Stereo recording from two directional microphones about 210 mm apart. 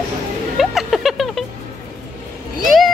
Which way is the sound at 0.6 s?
Centre (ahead or behind).